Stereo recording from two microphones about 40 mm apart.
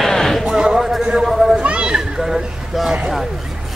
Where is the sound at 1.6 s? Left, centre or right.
Right.